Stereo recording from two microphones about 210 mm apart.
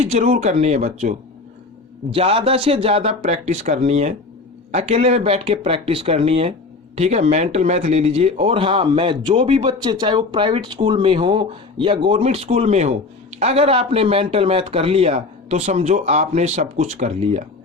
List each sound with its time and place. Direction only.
0.0 s speech: 30° right (ahead or behind)